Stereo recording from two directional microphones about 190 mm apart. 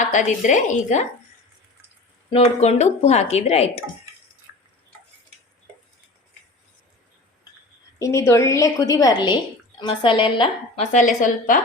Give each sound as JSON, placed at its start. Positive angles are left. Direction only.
{"t": 0.1, "sound": "speech", "side_deg": 40}
{"t": 2.3, "sound": "speech", "side_deg": 35}
{"t": 7.9, "sound": "a woman's voice", "side_deg": 15}
{"t": 10.9, "sound": "speech", "side_deg": 40}